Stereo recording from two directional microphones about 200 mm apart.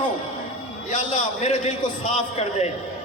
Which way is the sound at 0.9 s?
35° left (ahead or behind).